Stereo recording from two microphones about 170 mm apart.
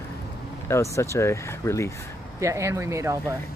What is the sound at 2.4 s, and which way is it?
Speech, 15° right (ahead or behind).